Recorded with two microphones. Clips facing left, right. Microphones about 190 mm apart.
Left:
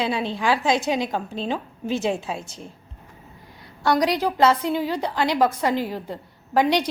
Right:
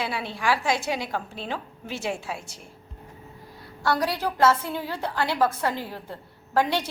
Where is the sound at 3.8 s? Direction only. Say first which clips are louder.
Left 5 dB; 15° left (ahead or behind).